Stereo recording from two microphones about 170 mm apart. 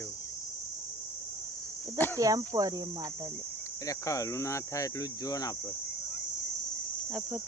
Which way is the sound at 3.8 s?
20° left (ahead or behind).